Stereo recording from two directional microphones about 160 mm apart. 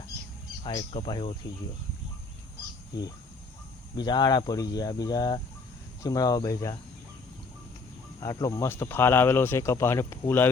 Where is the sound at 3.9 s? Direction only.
25° left (ahead or behind).